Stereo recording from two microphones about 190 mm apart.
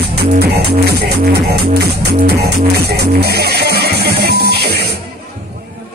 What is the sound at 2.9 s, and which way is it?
Music, 60° right (ahead or behind).